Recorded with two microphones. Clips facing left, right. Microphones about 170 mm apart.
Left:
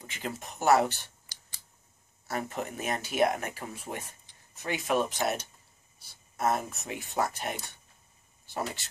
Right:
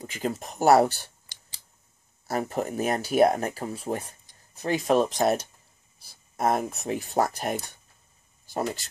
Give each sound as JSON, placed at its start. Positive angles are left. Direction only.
{"t": 0.0, "sound": "speech", "side_deg": -40}
{"t": 2.2, "sound": "speech", "side_deg": -35}